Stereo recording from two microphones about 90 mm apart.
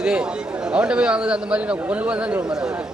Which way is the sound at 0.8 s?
10° right (ahead or behind).